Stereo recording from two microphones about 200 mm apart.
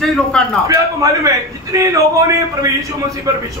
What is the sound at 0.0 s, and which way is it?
Speech, centre (ahead or behind).